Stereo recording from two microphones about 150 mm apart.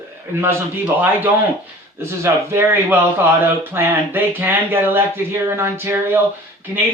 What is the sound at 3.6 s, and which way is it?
Speech, 15° right (ahead or behind).